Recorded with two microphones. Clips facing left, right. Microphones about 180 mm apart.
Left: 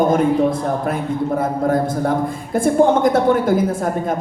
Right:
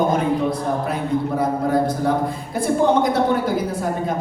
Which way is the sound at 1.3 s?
50° left (ahead or behind).